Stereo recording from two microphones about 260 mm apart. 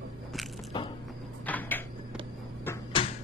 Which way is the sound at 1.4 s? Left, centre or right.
Centre.